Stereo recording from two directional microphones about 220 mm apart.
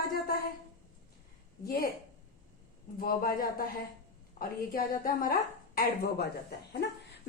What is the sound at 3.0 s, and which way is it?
Speech, 40° left (ahead or behind).